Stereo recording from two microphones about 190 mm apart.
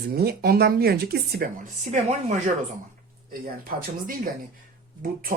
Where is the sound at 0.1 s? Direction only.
55° right (ahead or behind).